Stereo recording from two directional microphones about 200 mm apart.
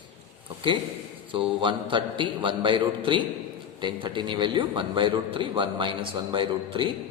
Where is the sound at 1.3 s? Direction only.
25° right (ahead or behind).